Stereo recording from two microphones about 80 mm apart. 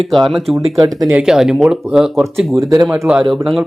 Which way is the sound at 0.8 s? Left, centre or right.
Right.